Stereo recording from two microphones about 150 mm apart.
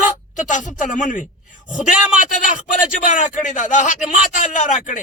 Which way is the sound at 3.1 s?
60° left (ahead or behind).